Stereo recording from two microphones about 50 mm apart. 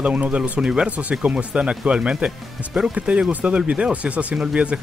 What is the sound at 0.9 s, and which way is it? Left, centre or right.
Speech, right.